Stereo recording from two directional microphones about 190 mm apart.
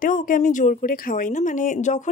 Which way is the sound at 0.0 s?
45° left (ahead or behind).